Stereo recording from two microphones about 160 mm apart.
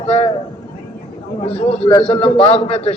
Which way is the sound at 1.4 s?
35° left (ahead or behind).